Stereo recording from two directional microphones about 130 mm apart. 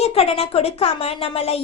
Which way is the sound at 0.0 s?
50° left (ahead or behind).